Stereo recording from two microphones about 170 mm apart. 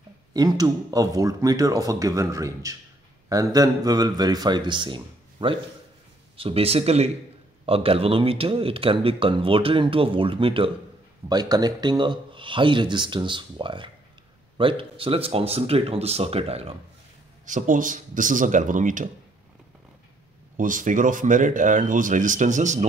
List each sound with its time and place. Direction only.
0.3 s a man's voice: 25° right (ahead or behind)
17.5 s speech: 50° right (ahead or behind)
20.5 s speech: 50° right (ahead or behind)